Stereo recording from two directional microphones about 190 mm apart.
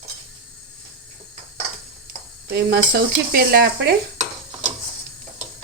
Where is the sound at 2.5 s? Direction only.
55° right (ahead or behind).